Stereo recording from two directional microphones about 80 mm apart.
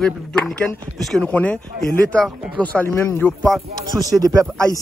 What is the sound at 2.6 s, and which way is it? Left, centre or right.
Speech, left.